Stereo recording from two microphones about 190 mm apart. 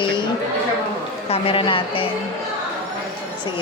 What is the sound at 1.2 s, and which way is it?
Speech, 30° left (ahead or behind).